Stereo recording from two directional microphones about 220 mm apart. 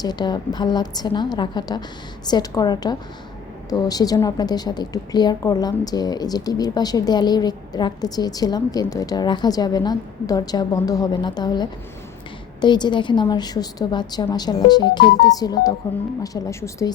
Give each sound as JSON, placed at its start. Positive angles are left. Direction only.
{"t": 0.0, "sound": "a woman's voice", "side_deg": 20}